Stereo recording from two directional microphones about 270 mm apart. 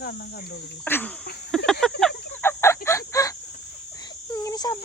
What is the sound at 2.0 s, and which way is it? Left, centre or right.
Cricket, centre.